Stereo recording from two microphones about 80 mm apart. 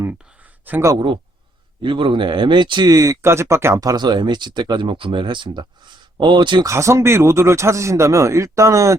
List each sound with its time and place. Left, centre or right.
1.8 s speech: right
2.9 s speech: right
3.8 s speech: right
6.7 s speech: right